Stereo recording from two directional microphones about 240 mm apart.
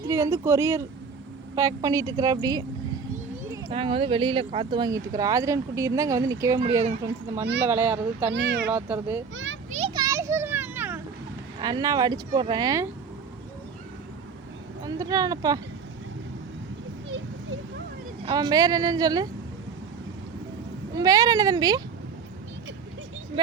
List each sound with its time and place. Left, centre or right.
0.0 s speech: centre
3.7 s speech: right
7.6 s speech: centre
8.3 s speech: right
8.7 s speech: centre
9.3 s speech: right
9.7 s children playing: right
11.6 s speech: centre
14.8 s speech: centre
18.3 s speech: centre
20.9 s speech: centre